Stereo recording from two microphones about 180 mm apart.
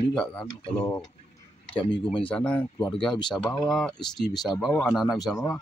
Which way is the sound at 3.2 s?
20° left (ahead or behind).